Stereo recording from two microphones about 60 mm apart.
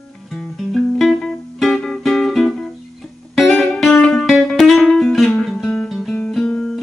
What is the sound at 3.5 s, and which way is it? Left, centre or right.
Music, centre.